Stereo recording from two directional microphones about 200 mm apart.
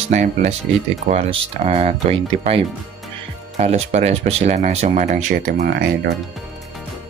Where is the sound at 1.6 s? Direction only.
30° right (ahead or behind); by 6.1 s 50° right (ahead or behind).